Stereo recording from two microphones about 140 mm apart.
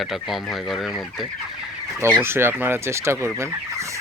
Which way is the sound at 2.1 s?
15° right (ahead or behind).